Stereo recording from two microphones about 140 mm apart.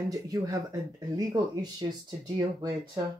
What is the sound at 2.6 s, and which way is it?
Speech, 25° right (ahead or behind).